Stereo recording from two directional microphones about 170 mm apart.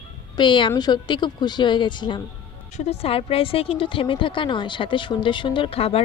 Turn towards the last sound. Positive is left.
turn(degrees=35)  # may be behind; listen again after turning